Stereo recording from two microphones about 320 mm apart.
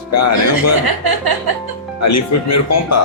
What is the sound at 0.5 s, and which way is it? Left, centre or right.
Speech, right.